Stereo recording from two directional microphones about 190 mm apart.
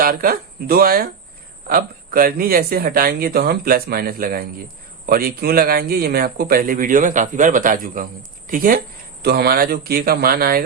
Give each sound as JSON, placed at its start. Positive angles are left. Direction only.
{"t": 0.0, "sound": "speech", "side_deg": -50}